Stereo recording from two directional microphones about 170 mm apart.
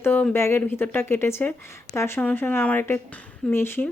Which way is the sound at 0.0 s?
10° left (ahead or behind).